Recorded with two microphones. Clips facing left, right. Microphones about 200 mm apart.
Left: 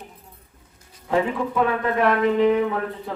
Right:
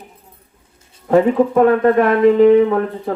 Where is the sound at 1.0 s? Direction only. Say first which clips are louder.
Right 10 dB; 50° right (ahead or behind).